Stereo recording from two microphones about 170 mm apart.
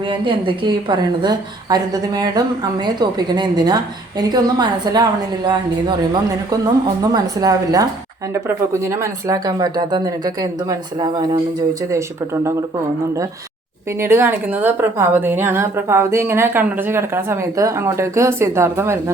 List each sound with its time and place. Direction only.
0.1 s speech: 30° right (ahead or behind)
7.0 s a woman's voice: 20° right (ahead or behind)
14.0 s a woman's voice: 15° right (ahead or behind)